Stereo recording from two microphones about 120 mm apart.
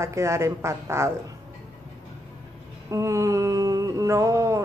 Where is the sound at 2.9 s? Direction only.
25° right (ahead or behind).